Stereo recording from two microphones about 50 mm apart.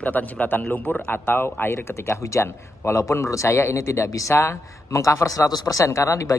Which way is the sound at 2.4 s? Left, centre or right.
Left.